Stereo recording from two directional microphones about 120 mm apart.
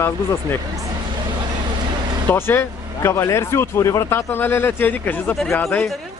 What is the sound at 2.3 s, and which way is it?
Speech, 20° left (ahead or behind).